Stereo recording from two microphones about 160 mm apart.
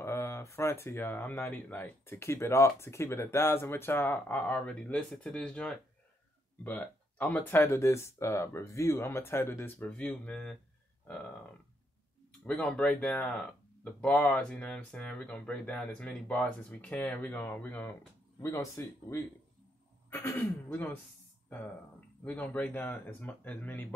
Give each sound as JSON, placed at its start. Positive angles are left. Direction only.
{"t": 0.0, "sound": "speech", "side_deg": 15}
{"t": 12.3, "sound": "speech", "side_deg": 10}
{"t": 22.2, "sound": "speech", "side_deg": 10}